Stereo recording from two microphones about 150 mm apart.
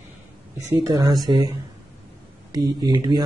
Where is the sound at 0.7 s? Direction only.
30° right (ahead or behind).